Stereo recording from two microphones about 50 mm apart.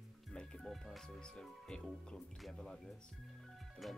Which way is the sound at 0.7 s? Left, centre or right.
Centre.